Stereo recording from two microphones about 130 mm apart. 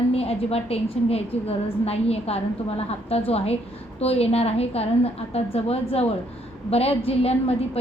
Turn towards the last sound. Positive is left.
turn(degrees=50)  # may be behind; listen again after turning